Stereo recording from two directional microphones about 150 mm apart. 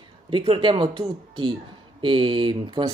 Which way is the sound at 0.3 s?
30° right (ahead or behind).